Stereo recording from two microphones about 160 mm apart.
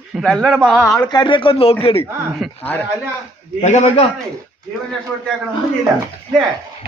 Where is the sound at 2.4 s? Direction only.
Centre (ahead or behind).